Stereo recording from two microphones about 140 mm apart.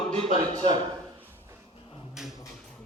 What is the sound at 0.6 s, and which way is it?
Speech, 40° right (ahead or behind).